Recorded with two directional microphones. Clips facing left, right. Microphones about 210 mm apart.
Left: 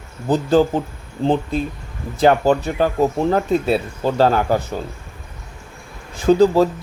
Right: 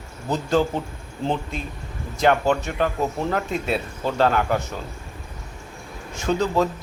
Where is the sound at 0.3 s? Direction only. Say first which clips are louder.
Left 6 dB; 35° left (ahead or behind).